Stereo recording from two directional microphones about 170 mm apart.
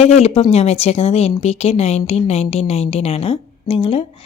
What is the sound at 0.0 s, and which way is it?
A woman's voice, 40° left (ahead or behind).